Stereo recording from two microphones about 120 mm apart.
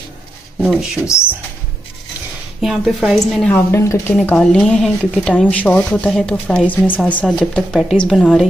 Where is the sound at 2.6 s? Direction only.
5° right (ahead or behind).